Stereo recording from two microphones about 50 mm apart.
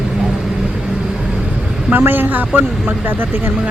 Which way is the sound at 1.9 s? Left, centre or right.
Right.